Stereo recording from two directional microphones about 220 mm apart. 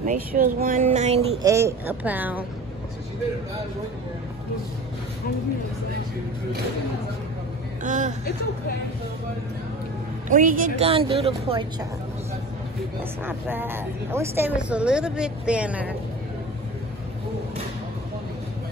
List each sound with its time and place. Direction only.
0.0 s speech: 35° right (ahead or behind)
1.4 s a woman's voice: 15° right (ahead or behind)
7.8 s speech: 35° right (ahead or behind)
10.3 s a woman's voice: 35° right (ahead or behind)
13.2 s a woman's voice: 10° right (ahead or behind)